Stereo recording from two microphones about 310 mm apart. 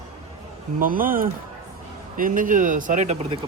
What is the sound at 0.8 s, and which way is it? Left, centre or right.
Speech, right.